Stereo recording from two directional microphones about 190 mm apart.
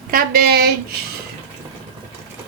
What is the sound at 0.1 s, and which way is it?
Speech, 50° right (ahead or behind).